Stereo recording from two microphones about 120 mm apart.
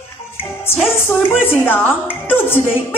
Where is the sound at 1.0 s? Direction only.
15° left (ahead or behind).